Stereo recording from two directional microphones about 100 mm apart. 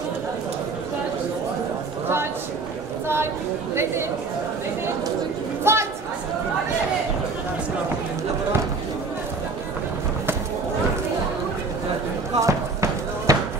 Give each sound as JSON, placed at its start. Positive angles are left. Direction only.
{"t": 5.6, "sound": "chatter", "side_deg": -25}
{"t": 12.4, "sound": "basketball bounce", "side_deg": -30}